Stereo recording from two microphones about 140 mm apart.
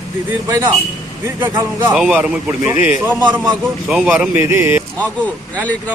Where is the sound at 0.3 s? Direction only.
20° right (ahead or behind); by 4.1 s 5° right (ahead or behind).